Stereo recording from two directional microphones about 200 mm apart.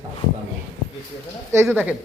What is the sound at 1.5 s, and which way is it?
Speech, 15° right (ahead or behind).